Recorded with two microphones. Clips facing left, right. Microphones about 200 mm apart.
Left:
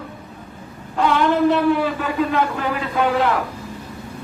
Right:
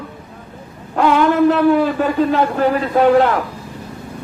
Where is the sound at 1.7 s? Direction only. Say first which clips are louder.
Right 5 dB; 45° right (ahead or behind).